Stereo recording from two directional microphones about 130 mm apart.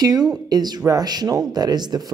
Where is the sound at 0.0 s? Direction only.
30° right (ahead or behind).